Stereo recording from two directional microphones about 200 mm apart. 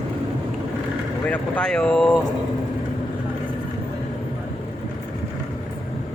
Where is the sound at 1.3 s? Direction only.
5° left (ahead or behind).